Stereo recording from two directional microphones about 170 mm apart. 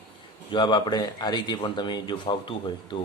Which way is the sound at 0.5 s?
25° left (ahead or behind).